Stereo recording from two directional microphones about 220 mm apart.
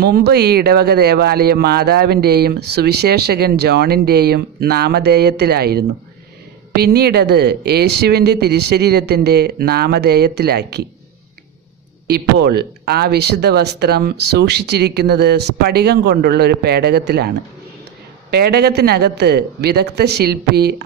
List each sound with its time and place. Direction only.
0.0 s speech: 45° right (ahead or behind)
12.1 s speech: 45° right (ahead or behind)
18.3 s speech: 45° right (ahead or behind)